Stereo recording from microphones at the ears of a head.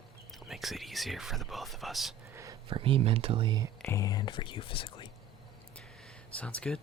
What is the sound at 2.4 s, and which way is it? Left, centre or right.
Speech, right.